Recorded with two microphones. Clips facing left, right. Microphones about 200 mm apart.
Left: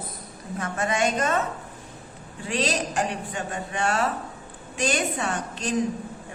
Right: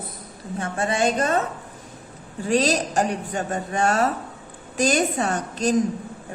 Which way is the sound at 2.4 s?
40° right (ahead or behind).